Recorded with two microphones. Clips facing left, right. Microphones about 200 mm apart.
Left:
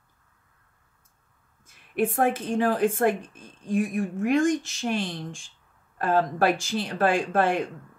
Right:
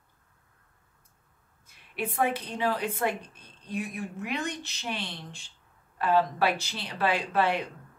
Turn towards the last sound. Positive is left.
turn(degrees=45)  # may be behind; listen again after turning